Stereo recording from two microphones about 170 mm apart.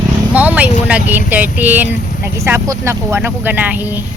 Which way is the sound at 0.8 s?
10° right (ahead or behind).